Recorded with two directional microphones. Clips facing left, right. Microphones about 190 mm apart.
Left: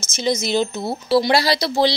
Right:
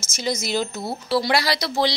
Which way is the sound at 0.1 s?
20° left (ahead or behind).